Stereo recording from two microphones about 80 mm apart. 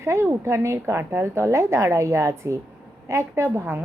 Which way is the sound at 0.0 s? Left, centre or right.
Right.